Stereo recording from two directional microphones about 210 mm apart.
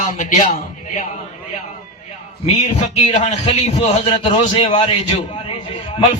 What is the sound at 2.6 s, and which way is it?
A man's voice, 35° left (ahead or behind).